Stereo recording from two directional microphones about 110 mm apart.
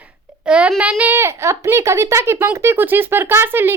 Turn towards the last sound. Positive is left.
turn(degrees=-20)  # may be behind; listen again after turning